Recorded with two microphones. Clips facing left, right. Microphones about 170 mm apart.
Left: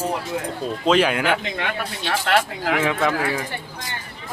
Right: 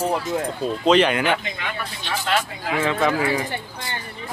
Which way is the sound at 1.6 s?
65° left (ahead or behind).